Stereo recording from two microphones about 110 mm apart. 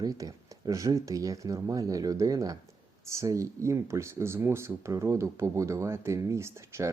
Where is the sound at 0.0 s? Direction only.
35° right (ahead or behind).